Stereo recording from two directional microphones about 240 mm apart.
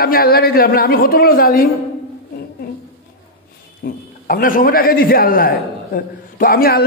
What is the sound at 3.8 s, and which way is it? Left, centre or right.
A man's voice, left.